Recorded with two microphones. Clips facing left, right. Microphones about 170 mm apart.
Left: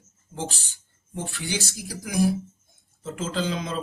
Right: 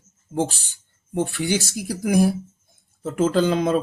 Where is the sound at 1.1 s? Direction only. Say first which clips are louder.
Right 9 dB; 55° right (ahead or behind).